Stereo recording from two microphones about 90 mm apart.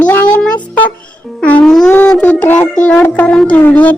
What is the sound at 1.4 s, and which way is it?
Music, 15° left (ahead or behind).